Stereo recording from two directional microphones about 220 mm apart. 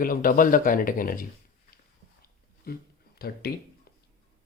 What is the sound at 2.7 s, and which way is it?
Speech, 40° left (ahead or behind).